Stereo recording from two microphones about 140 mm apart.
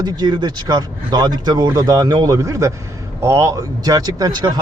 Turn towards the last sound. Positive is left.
turn(degrees=-30)  # may be behind; listen again after turning